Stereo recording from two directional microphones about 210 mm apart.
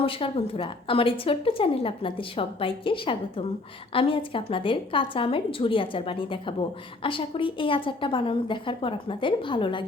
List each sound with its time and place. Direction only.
0.0 s a woman's voice: 25° left (ahead or behind)